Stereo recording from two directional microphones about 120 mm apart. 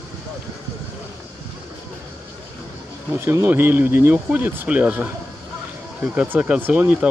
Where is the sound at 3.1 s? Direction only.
20° right (ahead or behind).